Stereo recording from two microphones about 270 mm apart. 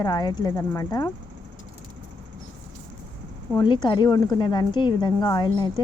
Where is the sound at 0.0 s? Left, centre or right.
Centre.